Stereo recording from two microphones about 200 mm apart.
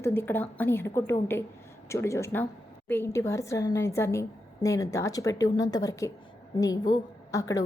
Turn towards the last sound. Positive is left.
turn(degrees=15)  # may be behind; listen again after turning